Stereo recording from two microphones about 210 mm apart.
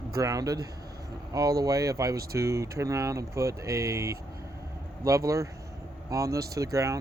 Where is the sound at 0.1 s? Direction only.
15° right (ahead or behind).